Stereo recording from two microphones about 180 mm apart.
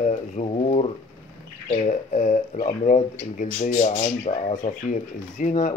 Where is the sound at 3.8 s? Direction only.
35° left (ahead or behind).